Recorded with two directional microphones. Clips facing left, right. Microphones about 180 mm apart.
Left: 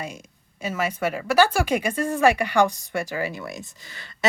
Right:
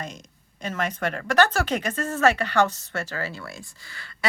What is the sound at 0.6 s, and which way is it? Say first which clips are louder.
Speech: left 2 dB; 10° left (ahead or behind).